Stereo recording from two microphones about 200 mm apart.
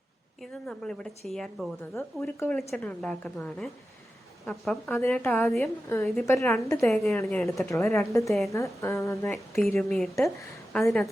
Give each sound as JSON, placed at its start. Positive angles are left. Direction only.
{"t": 0.7, "sound": "a woman's voice", "side_deg": 5}
{"t": 4.9, "sound": "a woman's voice", "side_deg": 10}
{"t": 6.2, "sound": "a woman's voice", "side_deg": 15}
{"t": 6.8, "sound": "a woman's voice", "side_deg": 0}
{"t": 7.7, "sound": "a woman's voice", "side_deg": 15}
{"t": 8.3, "sound": "a woman's voice", "side_deg": 0}
{"t": 8.5, "sound": "a woman's voice", "side_deg": 15}
{"t": 9.7, "sound": "a woman's voice", "side_deg": 0}